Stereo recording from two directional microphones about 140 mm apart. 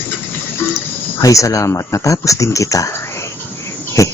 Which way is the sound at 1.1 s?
25° left (ahead or behind).